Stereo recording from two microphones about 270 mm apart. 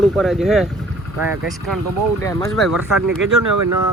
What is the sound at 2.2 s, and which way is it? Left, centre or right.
Speech, centre.